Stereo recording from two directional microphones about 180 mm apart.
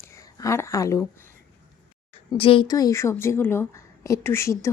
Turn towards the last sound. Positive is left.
turn(degrees=15)  # may be behind; listen again after turning